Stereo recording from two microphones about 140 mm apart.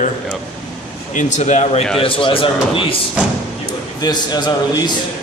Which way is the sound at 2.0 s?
40° left (ahead or behind).